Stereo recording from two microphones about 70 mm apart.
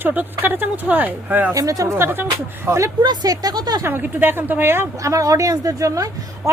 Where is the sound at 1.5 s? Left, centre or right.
Right.